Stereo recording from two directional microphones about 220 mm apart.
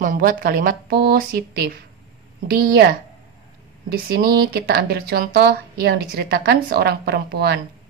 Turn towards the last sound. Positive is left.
turn(degrees=-45)  # may be behind; listen again after turning